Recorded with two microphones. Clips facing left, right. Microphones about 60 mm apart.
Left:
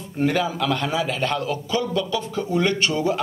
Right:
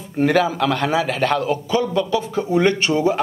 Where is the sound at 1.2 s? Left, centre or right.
Right.